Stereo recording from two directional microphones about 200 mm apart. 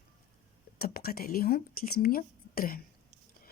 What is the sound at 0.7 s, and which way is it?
Speech, 50° left (ahead or behind).